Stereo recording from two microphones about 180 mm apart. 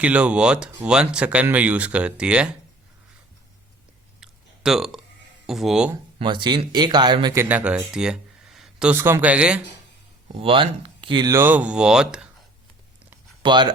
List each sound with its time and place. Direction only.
0.0 s speech: 5° right (ahead or behind)
4.2 s a sound: centre (ahead or behind)
5.5 s speech: centre (ahead or behind)
6.1 s speech: 25° right (ahead or behind)
7.3 s speech: 10° right (ahead or behind)
10.4 s speech: 30° right (ahead or behind); by 12.3 s 5° right (ahead or behind)
13.4 s speech: 25° right (ahead or behind)